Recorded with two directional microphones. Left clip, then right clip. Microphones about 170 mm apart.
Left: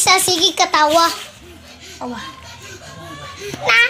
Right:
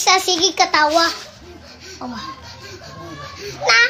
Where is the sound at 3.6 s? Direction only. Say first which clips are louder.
Even; centre (ahead or behind).